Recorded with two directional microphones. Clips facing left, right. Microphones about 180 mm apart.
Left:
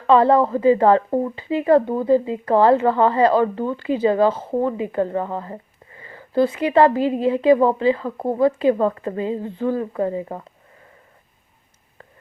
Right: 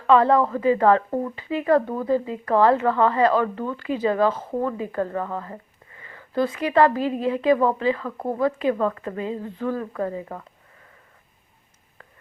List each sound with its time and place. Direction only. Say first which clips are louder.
0.1 s speech: left 3 dB; 30° left (ahead or behind)